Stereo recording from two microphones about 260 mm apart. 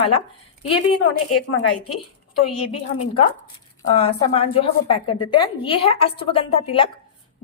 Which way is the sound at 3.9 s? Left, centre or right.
Left.